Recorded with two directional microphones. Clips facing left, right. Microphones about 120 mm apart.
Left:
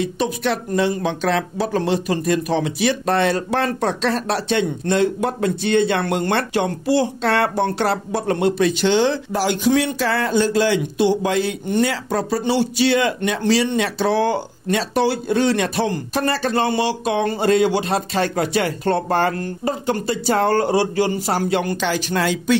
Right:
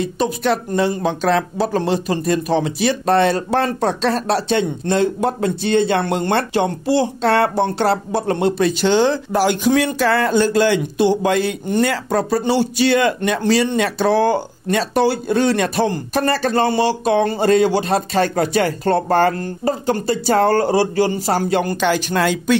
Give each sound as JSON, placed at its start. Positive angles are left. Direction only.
{"t": 0.0, "sound": "speech", "side_deg": -40}
{"t": 21.7, "sound": "speech", "side_deg": -55}